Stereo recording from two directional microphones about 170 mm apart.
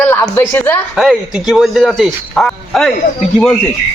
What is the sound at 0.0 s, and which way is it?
Speech, 10° left (ahead or behind).